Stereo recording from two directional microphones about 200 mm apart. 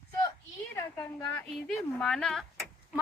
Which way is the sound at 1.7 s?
5° left (ahead or behind).